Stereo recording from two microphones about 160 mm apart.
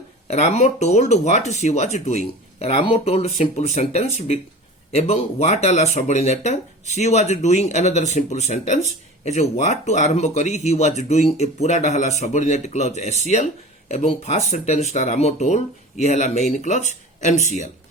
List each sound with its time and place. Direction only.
0.3 s speech: 45° left (ahead or behind)